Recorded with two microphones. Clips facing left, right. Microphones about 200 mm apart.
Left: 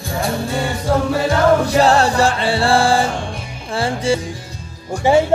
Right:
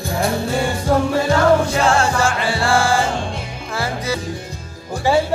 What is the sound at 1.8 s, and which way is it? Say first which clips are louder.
Music: left 3 dB; 35° left (ahead or behind).